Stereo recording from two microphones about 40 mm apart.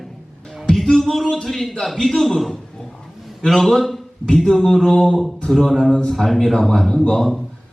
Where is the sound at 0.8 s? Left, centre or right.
Centre.